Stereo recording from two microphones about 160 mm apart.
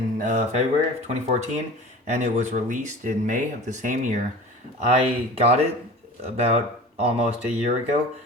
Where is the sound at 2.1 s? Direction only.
45° right (ahead or behind).